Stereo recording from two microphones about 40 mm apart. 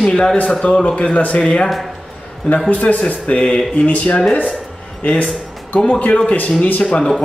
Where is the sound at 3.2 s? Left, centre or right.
Left.